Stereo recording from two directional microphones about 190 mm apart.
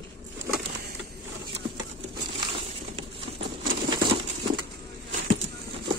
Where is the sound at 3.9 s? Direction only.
25° right (ahead or behind).